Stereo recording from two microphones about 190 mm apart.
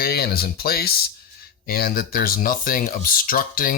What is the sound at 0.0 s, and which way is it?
Speech, 55° left (ahead or behind).